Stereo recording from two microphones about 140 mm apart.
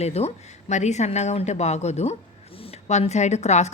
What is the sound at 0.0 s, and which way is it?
Speech, 50° left (ahead or behind).